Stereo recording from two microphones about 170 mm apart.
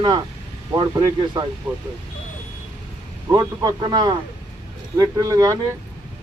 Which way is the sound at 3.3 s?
25° right (ahead or behind).